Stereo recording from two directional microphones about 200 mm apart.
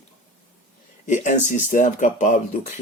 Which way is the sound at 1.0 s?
35° left (ahead or behind).